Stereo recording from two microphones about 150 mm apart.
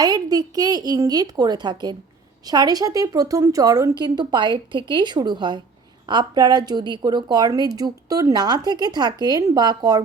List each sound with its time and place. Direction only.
0.0 s a woman's voice: 25° right (ahead or behind)